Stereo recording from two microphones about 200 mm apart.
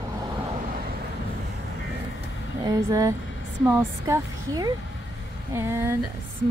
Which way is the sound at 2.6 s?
15° right (ahead or behind).